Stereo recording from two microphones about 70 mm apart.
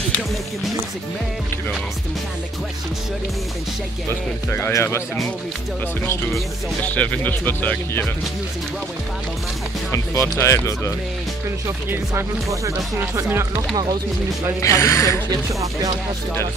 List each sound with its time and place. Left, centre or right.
4.5 s speech: left
6.8 s speech: left
9.8 s speech: left
12.2 s speech: right
14.6 s speech: left